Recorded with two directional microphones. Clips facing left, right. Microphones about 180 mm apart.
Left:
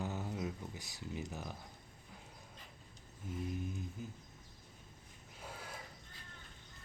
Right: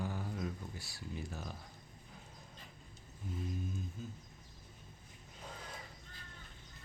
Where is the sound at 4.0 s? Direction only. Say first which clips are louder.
Even; 15° left (ahead or behind).